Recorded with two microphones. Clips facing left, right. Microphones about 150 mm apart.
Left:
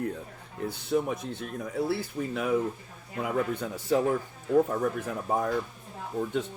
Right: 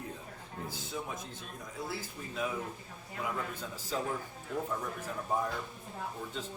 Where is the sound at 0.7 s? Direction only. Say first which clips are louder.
Left 14 dB; 65° left (ahead or behind).